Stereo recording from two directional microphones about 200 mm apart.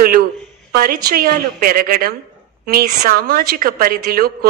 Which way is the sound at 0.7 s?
50° right (ahead or behind).